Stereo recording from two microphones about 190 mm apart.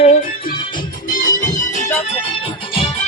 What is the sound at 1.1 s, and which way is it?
Music, 45° left (ahead or behind).